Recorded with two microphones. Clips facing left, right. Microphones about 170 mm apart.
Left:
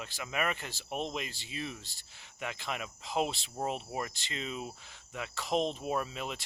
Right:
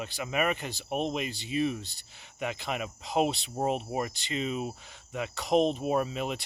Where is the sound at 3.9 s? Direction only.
15° right (ahead or behind).